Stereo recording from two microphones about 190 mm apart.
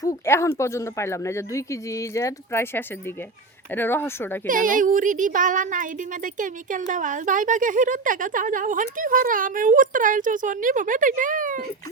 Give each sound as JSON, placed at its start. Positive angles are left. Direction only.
{"t": 0.0, "sound": "speech", "side_deg": 15}
{"t": 4.4, "sound": "speech", "side_deg": -45}